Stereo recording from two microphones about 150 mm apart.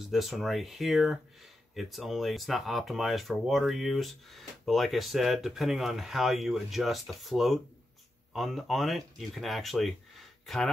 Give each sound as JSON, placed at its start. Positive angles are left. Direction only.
{"t": 0.0, "sound": "speech", "side_deg": 0}